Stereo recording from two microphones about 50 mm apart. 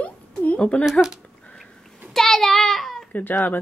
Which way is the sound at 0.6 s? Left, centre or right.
Left.